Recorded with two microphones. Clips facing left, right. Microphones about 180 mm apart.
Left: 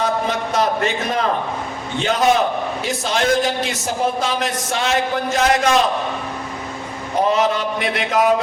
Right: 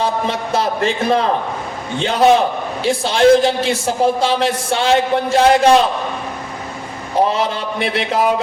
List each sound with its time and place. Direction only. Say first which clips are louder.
0.0 s a man's voice: right 1 dB; 30° right (ahead or behind)
7.3 s a man's voice: left 1 dB; 30° right (ahead or behind)